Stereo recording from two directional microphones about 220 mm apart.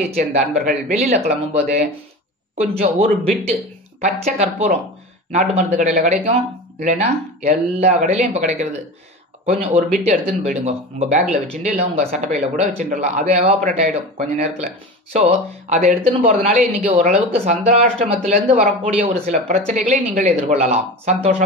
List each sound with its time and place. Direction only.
0.3 s speech: 35° right (ahead or behind)